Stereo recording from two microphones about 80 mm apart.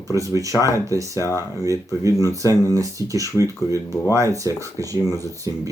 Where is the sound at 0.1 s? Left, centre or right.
Right.